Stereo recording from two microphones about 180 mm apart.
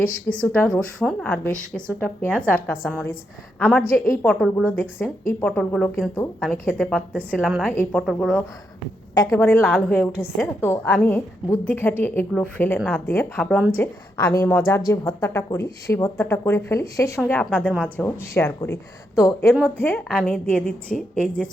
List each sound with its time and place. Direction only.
0.0 s a woman's voice: 5° left (ahead or behind)
9.1 s a woman's voice: 20° left (ahead or behind)
13.7 s a woman's voice: 20° left (ahead or behind)